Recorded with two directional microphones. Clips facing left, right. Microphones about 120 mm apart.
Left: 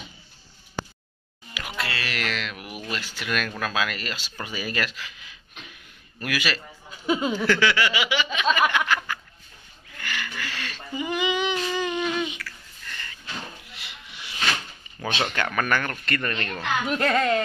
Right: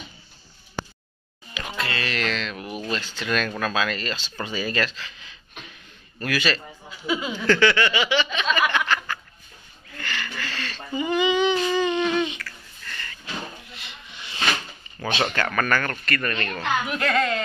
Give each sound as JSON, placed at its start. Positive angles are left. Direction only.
{"t": 1.5, "sound": "a sound", "side_deg": 5}
{"t": 2.9, "sound": "speech", "side_deg": 10}
{"t": 7.1, "sound": "speech", "side_deg": 40}
{"t": 7.3, "sound": "speech", "side_deg": 10}
{"t": 8.5, "sound": "a sound", "side_deg": 10}
{"t": 11.7, "sound": "humming", "side_deg": 10}
{"t": 13.7, "sound": "a sound", "side_deg": 15}
{"t": 15.3, "sound": "speech", "side_deg": 15}
{"t": 16.9, "sound": "speech", "side_deg": 35}